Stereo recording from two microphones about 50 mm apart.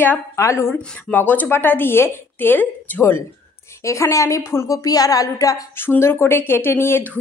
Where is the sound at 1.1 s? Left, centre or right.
Left.